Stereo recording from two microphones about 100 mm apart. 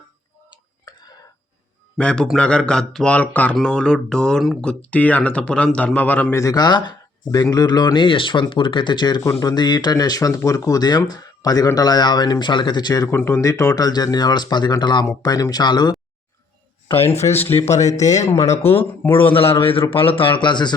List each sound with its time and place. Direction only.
0.9 s a sound: 45° left (ahead or behind)
2.0 s speech: 10° left (ahead or behind)
6.3 s speech: 35° left (ahead or behind)
13.1 s speech: 25° left (ahead or behind)
13.5 s speech: 35° left (ahead or behind)
17.1 s speech: 90° left
17.4 s speech: 20° left (ahead or behind)
17.9 s speech: 30° left (ahead or behind)
19.1 s speech: 60° left (ahead or behind)